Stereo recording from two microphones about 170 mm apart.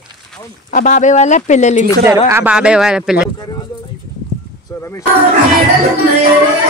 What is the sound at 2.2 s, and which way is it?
Speech, 10° right (ahead or behind).